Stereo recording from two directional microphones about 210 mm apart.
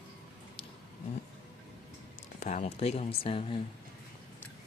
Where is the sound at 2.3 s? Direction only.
35° left (ahead or behind).